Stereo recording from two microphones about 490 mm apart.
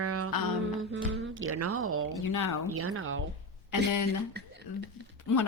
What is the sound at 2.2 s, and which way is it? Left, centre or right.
Speech, left.